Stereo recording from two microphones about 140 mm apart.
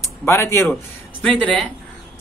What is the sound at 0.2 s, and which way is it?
Speech, 20° left (ahead or behind).